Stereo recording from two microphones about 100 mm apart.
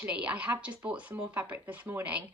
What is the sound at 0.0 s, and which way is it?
A woman's voice, 15° right (ahead or behind).